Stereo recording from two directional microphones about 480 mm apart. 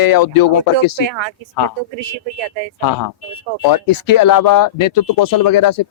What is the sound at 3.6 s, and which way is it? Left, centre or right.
Speech, left.